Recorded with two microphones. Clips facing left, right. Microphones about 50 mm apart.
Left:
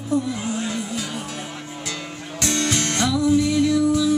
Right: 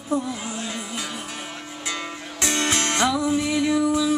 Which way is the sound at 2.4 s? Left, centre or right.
Centre.